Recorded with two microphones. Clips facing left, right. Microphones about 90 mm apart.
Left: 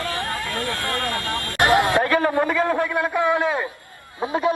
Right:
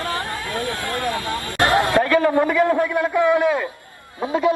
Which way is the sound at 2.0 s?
30° left (ahead or behind).